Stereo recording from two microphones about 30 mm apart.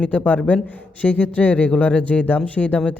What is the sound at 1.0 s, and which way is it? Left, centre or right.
Speech, left.